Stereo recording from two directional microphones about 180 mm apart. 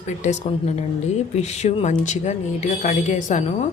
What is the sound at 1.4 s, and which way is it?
A woman's voice, 40° left (ahead or behind).